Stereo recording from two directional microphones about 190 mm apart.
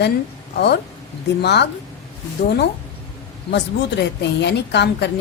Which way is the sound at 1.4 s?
60° left (ahead or behind).